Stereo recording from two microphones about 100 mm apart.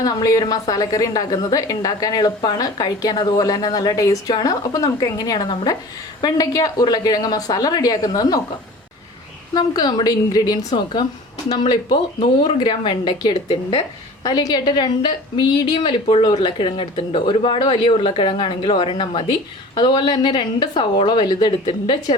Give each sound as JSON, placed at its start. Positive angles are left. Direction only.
{"t": 0.0, "sound": "a woman's voice", "side_deg": 40}
{"t": 9.6, "sound": "a woman's voice", "side_deg": 40}